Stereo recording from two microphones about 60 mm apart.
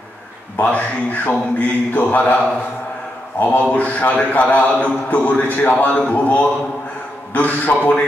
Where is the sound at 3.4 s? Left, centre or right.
Left.